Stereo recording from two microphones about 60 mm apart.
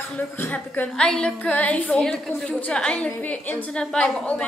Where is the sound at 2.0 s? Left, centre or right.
Centre.